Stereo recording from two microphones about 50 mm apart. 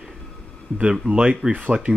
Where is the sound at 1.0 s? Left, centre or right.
Right.